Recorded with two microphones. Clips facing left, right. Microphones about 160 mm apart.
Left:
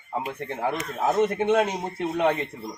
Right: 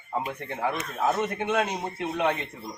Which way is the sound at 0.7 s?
25° left (ahead or behind).